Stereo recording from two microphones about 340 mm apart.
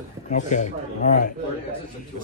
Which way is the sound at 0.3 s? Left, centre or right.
Left.